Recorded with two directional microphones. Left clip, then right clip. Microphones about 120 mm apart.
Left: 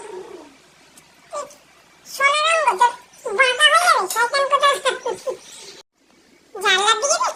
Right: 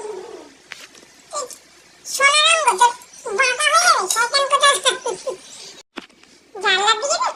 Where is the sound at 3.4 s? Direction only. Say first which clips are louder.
Left 2 dB; 20° left (ahead or behind).